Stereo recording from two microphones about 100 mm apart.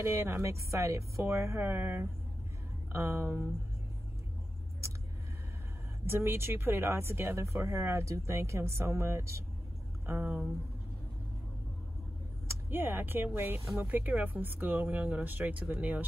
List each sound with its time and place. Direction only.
0.0 s speech: 25° right (ahead or behind)
6.0 s speech: 25° right (ahead or behind)
12.4 s speech: 20° right (ahead or behind)